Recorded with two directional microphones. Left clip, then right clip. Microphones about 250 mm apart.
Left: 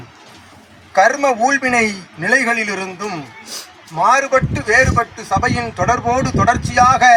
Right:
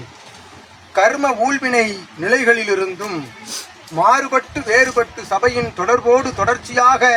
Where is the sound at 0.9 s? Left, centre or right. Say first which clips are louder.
Left 2 dB; left.